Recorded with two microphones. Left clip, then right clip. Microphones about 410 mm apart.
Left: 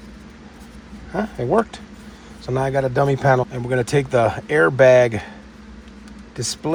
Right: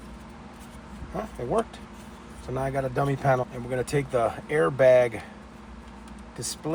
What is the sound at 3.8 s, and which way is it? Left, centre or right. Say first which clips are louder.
Speech: left 7 dB; left.